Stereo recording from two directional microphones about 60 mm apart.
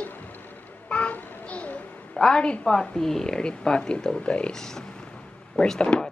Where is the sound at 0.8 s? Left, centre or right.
Left.